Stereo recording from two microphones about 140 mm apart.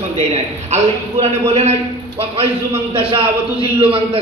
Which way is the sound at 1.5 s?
50° right (ahead or behind).